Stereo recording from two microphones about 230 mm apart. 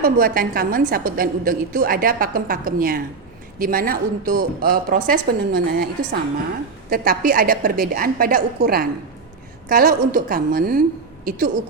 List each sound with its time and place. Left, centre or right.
0.0 s a woman's voice: right
6.9 s a woman's voice: right